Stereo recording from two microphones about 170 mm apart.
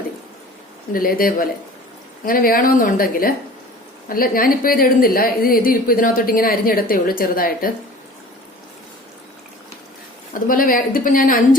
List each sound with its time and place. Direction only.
0.9 s a woman's voice: 55° left (ahead or behind)
10.4 s a woman's voice: 55° left (ahead or behind)